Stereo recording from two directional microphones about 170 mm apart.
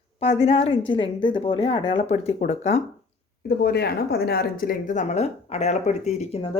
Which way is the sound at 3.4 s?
70° left (ahead or behind).